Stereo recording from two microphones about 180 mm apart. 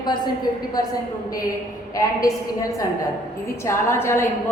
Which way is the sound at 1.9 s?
20° left (ahead or behind).